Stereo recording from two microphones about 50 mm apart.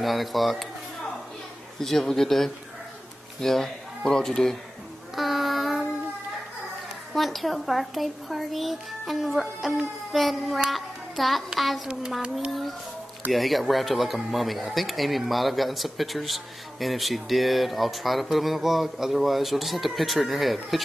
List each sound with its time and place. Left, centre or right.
0.0 s a child's voice: centre
1.8 s a child's voice: centre
5.1 s child singing: centre
7.2 s a child's voice: centre
12.2 s speech: right
13.3 s a child's voice: centre